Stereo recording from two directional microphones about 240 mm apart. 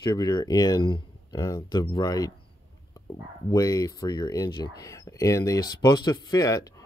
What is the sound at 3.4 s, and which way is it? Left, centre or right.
Speech, centre.